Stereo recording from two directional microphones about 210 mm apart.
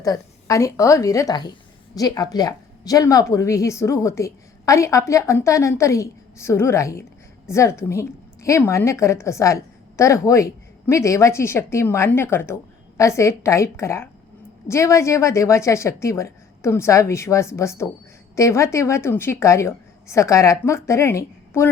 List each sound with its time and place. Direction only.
0.0 s a woman's voice: 15° left (ahead or behind)